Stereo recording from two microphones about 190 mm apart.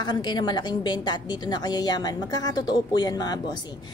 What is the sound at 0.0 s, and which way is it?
A woman's voice, 25° left (ahead or behind).